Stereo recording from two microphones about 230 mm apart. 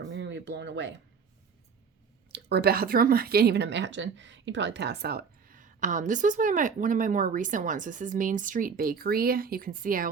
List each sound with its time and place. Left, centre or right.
0.1 s speech: right
2.3 s speech: right